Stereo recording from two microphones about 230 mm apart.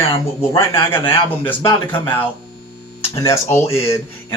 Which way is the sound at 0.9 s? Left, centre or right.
Centre.